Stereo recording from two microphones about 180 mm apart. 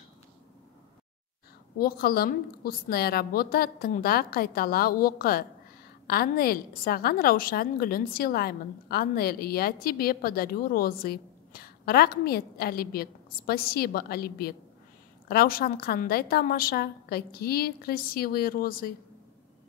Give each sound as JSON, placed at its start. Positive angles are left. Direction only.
{"t": 1.8, "sound": "a woman's voice", "side_deg": 55}